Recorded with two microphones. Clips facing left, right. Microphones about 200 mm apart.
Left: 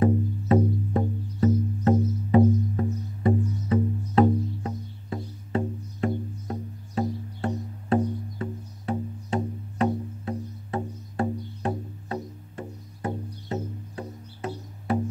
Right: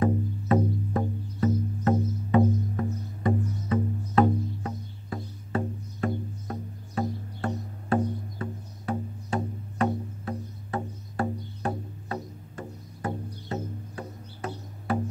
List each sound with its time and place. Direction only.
0.0 s music: 25° left (ahead or behind)